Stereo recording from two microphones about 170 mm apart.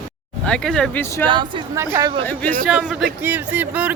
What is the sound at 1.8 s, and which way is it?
Speech, 15° right (ahead or behind).